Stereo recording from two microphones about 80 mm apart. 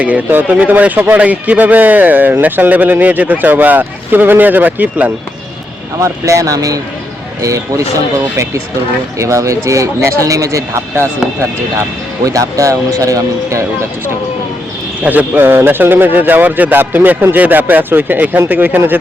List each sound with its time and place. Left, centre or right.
0.0 s a man's voice: centre
6.0 s speech: right
15.0 s a man's voice: right